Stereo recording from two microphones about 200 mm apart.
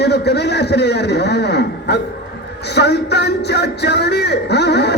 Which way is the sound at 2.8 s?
55° left (ahead or behind).